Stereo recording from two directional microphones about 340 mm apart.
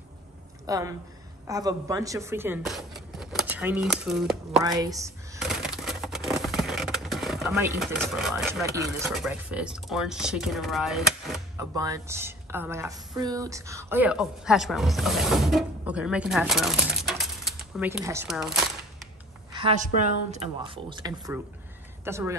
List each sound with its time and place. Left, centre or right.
0.7 s speech: centre
19.5 s a woman's voice: centre